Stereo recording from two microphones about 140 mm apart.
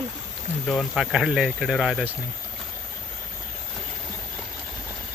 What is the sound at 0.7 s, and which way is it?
Speech, centre (ahead or behind).